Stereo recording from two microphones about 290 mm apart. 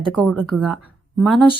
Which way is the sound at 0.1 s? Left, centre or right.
Centre.